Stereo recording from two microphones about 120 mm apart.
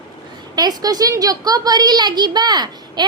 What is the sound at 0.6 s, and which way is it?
A woman's voice, 30° right (ahead or behind).